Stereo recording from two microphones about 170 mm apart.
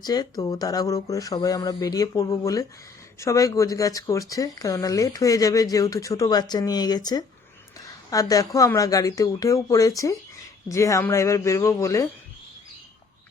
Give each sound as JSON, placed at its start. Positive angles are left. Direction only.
{"t": 0.0, "sound": "speech", "side_deg": 20}